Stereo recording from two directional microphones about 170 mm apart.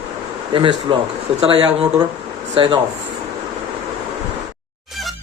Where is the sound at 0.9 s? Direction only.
30° right (ahead or behind).